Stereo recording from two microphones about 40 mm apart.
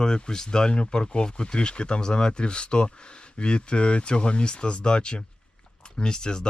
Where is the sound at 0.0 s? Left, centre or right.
Centre.